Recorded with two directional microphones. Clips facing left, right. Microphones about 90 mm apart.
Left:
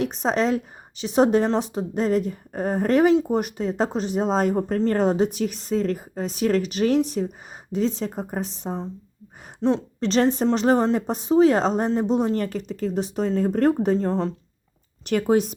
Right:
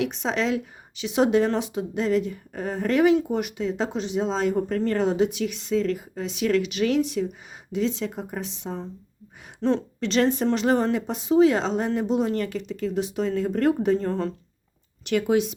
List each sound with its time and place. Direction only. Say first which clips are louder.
0.0 s a woman's voice: left 3 dB; 40° left (ahead or behind)
9.6 s a woman's voice: left 1 dB; 20° left (ahead or behind)
10.0 s a woman's voice: left 3 dB; 35° left (ahead or behind)
14.0 s speech: left 3 dB; 20° left (ahead or behind)
15.0 s a woman's voice: left 2 dB; 40° left (ahead or behind)